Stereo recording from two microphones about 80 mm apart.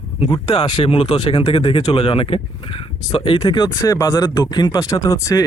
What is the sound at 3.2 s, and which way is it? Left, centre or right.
Speech, left.